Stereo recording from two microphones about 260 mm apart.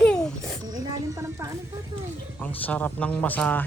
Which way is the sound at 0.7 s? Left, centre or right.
Centre.